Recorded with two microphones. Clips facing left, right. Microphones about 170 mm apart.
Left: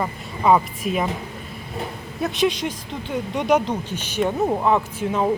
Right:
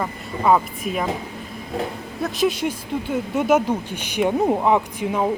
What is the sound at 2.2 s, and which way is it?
Speech, 5° right (ahead or behind).